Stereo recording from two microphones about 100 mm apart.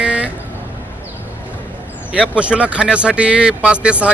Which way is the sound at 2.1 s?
10° right (ahead or behind).